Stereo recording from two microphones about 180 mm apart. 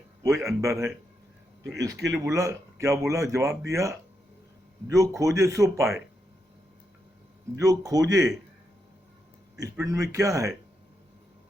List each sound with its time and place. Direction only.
0.2 s speech: 15° right (ahead or behind)
2.2 s speech: 15° right (ahead or behind)
7.5 s speech: 20° right (ahead or behind)
9.6 s speech: 15° right (ahead or behind)